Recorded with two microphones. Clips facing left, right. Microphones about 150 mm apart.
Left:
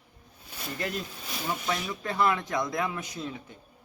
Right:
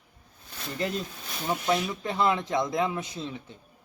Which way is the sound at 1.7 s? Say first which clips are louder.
Right 4 dB; 20° right (ahead or behind).